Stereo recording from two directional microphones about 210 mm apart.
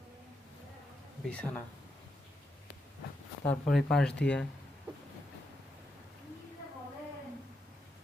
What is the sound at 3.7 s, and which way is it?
Speech, centre (ahead or behind).